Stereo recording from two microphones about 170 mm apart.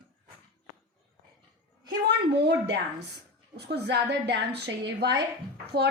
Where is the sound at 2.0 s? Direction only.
75° right (ahead or behind).